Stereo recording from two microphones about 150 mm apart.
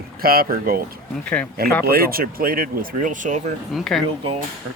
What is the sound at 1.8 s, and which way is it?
Speech, 85° right.